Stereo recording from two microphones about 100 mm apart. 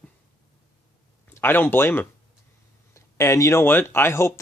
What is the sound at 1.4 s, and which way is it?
Speech, 20° left (ahead or behind).